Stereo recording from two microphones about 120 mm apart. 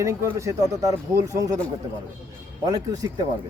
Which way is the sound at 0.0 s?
25° right (ahead or behind).